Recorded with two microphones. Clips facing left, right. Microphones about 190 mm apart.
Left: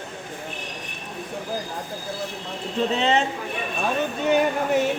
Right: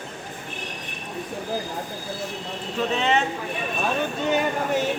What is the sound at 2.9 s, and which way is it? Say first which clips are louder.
Speech: left 1 dB; 30° left (ahead or behind).